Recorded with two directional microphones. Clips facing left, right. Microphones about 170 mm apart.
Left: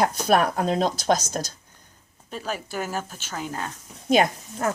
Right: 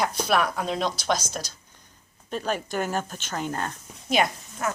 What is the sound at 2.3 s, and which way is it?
A woman's voice, 5° left (ahead or behind).